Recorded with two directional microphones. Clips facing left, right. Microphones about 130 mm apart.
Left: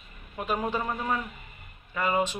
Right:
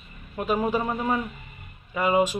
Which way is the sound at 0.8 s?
20° right (ahead or behind).